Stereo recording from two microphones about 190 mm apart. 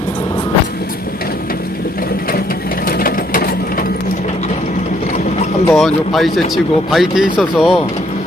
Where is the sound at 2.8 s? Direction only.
50° left (ahead or behind).